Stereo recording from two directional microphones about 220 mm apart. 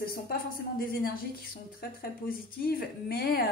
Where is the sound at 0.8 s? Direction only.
40° left (ahead or behind).